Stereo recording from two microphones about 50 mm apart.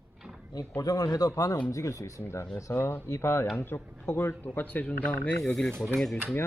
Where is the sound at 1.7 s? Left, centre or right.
Left.